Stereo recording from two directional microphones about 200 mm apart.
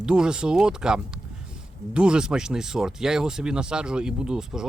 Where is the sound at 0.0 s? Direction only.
5° right (ahead or behind).